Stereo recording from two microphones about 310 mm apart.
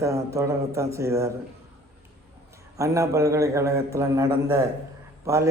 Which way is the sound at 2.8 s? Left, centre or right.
Centre.